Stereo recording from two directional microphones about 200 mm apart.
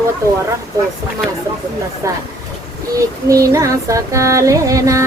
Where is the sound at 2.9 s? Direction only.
15° right (ahead or behind).